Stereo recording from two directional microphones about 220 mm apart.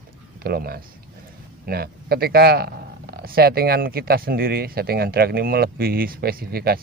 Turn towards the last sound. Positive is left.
turn(degrees=-45)  # may be behind; listen again after turning